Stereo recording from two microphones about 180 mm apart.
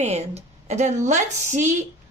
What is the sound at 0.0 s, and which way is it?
A woman's voice, 35° right (ahead or behind).